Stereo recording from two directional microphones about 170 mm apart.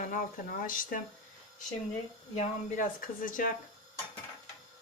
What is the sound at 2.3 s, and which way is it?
Speech, 45° left (ahead or behind).